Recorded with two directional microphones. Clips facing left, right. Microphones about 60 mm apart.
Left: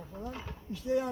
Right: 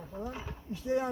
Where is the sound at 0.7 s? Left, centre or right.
Right.